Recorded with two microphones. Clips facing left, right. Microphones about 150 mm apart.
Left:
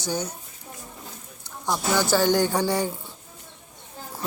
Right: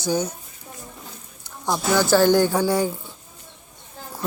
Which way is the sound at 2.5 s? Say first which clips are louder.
Right 3 dB; 5° right (ahead or behind).